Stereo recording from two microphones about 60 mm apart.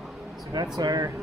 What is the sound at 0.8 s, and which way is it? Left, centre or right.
Speech, right.